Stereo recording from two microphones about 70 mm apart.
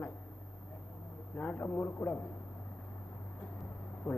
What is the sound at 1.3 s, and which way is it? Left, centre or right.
Speech, left.